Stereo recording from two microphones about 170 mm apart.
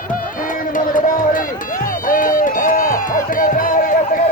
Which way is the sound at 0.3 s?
55° left (ahead or behind).